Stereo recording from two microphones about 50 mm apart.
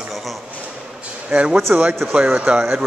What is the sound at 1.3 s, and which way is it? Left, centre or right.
Speech, right.